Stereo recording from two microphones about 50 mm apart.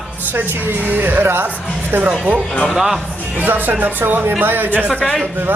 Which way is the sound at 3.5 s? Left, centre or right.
Right.